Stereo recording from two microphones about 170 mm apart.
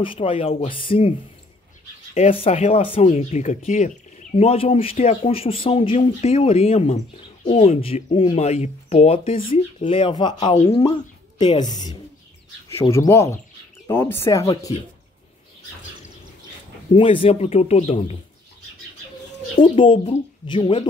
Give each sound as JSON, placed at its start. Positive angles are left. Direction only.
{"t": 0.0, "sound": "speech", "side_deg": 30}
{"t": 2.1, "sound": "a woman's voice", "side_deg": 35}
{"t": 16.9, "sound": "speech", "side_deg": 30}
{"t": 19.6, "sound": "speech", "side_deg": 30}